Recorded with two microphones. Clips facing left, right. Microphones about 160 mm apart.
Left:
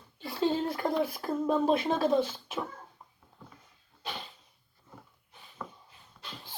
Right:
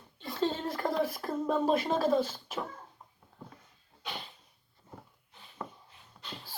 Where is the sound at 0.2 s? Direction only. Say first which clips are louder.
Left 2 dB; 5° left (ahead or behind).